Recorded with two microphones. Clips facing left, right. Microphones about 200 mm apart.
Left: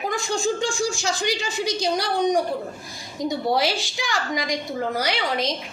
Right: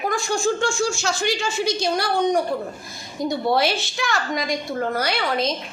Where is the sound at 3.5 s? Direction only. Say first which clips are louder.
Right 2 dB; 15° left (ahead or behind).